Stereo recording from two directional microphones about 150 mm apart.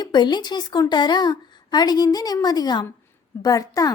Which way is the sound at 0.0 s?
30° left (ahead or behind).